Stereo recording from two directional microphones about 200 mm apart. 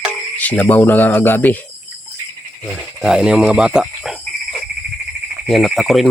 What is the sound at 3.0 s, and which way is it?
Speech, 5° right (ahead or behind).